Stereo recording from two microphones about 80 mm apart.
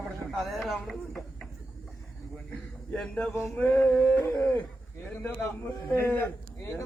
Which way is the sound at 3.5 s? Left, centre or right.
Centre.